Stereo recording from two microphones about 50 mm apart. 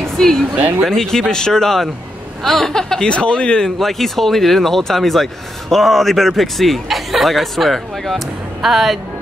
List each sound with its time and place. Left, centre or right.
0.0 s a sound: centre
0.6 s speech: right
0.8 s speech: centre
3.7 s speech: centre